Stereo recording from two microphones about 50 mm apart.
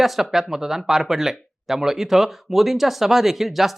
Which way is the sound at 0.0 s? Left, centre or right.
Centre.